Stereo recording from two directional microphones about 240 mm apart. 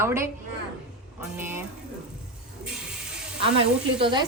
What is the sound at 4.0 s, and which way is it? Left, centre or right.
Speech, centre.